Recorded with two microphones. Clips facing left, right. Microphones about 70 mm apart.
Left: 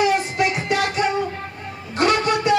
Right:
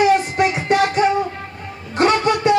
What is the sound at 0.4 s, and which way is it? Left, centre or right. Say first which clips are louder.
Music: right 3 dB; right.